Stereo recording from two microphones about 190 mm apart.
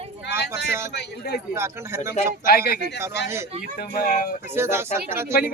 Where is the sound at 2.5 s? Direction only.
55° left (ahead or behind).